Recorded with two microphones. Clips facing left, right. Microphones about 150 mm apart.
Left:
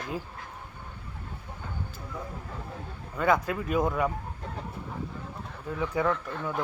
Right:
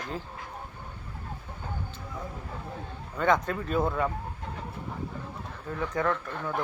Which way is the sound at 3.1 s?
5° left (ahead or behind).